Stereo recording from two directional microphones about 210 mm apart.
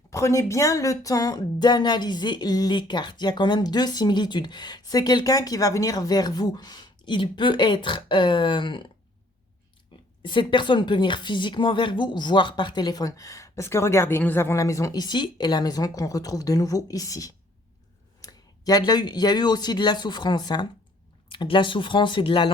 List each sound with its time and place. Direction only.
0.1 s a woman's voice: 15° left (ahead or behind)
9.9 s a sound: 25° left (ahead or behind)
10.2 s a woman's voice: 20° left (ahead or behind)